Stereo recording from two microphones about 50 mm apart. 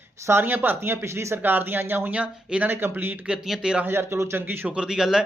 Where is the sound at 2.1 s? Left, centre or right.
Right.